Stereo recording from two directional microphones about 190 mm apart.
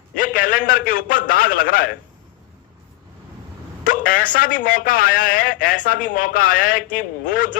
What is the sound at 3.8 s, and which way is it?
A man's voice, 45° left (ahead or behind).